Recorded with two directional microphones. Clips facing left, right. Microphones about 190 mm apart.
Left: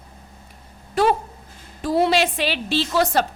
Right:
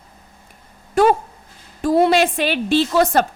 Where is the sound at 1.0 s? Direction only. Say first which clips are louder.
Right 4 dB; 45° right (ahead or behind).